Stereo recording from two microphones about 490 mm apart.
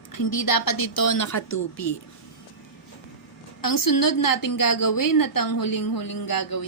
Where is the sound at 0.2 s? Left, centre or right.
Left.